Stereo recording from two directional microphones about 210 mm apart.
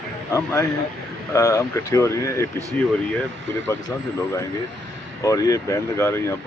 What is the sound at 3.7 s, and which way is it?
Speech, 15° left (ahead or behind).